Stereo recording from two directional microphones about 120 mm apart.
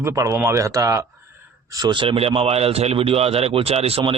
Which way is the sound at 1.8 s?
45° right (ahead or behind).